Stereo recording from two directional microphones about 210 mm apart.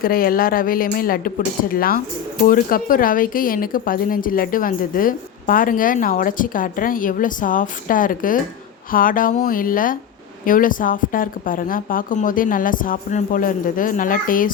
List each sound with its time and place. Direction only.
0.0 s a woman's voice: 45° left (ahead or behind)